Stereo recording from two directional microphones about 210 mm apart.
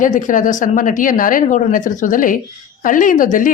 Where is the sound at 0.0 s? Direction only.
35° left (ahead or behind).